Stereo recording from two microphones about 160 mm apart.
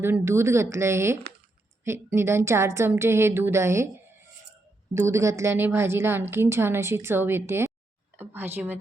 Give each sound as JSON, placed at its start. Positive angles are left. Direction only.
{"t": 0.0, "sound": "a woman's voice", "side_deg": -15}
{"t": 4.9, "sound": "a woman's voice", "side_deg": -15}